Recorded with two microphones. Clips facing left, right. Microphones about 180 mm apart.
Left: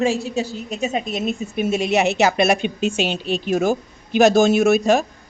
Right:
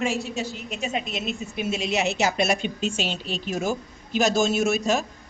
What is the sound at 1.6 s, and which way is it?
A woman's voice, 55° left (ahead or behind).